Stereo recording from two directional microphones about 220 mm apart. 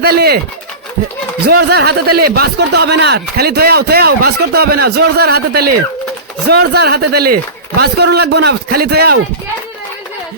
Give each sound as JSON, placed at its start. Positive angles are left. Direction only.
{"t": 0.0, "sound": "speech", "side_deg": -45}
{"t": 1.5, "sound": "speech", "side_deg": -45}